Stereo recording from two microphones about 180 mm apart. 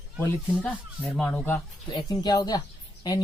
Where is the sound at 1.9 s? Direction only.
25° left (ahead or behind).